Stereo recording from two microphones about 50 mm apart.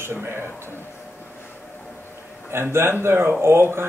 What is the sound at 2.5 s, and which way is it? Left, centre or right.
Speech, right.